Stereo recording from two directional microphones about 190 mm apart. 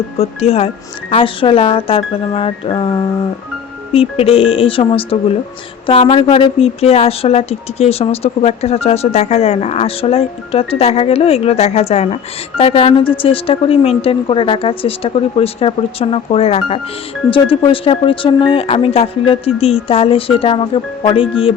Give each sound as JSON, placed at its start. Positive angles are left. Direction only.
{"t": 0.2, "sound": "speech", "side_deg": 35}
{"t": 4.2, "sound": "speech", "side_deg": 30}